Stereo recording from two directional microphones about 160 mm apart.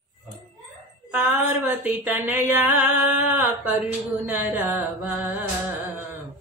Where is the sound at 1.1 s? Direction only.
10° right (ahead or behind).